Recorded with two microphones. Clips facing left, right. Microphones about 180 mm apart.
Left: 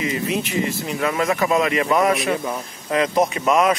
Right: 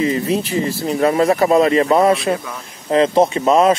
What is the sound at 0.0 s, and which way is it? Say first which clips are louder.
Speech: right 5 dB; 35° right (ahead or behind).